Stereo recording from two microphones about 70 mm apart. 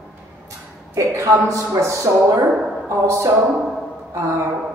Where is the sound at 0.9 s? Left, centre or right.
Right.